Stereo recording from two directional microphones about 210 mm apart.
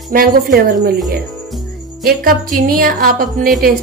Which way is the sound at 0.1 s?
50° right (ahead or behind).